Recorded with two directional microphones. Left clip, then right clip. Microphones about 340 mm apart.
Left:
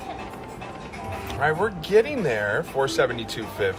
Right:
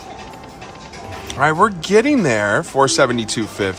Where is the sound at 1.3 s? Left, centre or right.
Right.